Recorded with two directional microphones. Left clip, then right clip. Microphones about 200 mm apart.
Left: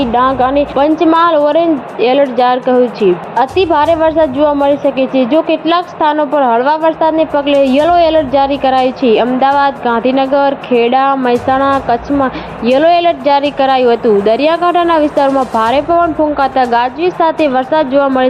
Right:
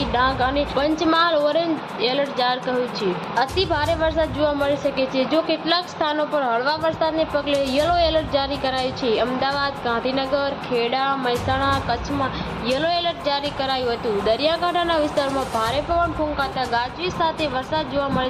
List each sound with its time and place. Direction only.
0.0 s a woman's voice: 20° left (ahead or behind)